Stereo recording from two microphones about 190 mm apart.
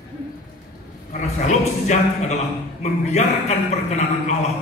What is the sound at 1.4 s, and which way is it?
A man's voice, 40° left (ahead or behind).